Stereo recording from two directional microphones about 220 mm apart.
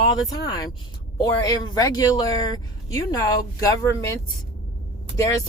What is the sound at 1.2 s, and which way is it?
A woman's voice, 20° left (ahead or behind).